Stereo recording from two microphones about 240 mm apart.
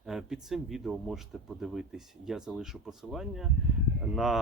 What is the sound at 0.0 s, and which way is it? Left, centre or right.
Speech, centre.